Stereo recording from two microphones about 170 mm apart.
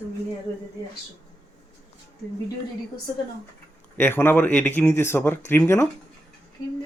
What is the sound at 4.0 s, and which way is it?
Speech, 10° left (ahead or behind).